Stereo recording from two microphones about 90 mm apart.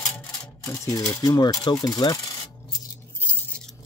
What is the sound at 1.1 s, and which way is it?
Speech, 45° left (ahead or behind).